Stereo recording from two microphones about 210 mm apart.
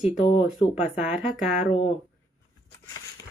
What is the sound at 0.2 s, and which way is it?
Speech, 30° left (ahead or behind).